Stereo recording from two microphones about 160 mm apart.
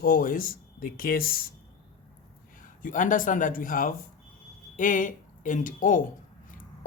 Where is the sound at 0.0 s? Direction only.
60° left (ahead or behind).